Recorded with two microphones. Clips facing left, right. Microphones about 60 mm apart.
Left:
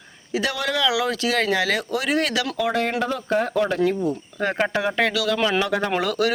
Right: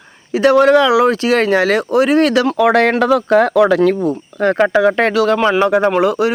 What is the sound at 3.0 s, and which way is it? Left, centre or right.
Speech, right.